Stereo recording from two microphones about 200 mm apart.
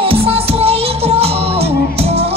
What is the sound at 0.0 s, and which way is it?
Music, 30° right (ahead or behind).